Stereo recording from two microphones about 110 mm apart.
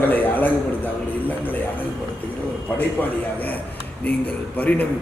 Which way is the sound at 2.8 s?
15° left (ahead or behind).